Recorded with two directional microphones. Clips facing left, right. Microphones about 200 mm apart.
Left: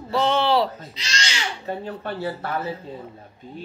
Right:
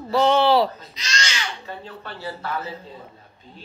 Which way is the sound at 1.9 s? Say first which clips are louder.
Left 5 dB; 50° left (ahead or behind).